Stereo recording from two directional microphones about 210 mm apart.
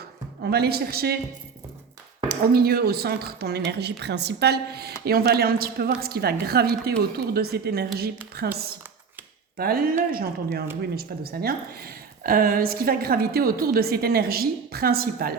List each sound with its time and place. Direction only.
0.4 s a woman's voice: 50° right (ahead or behind)
2.2 s a woman's voice: 50° right (ahead or behind)
9.6 s a woman's voice: 45° right (ahead or behind)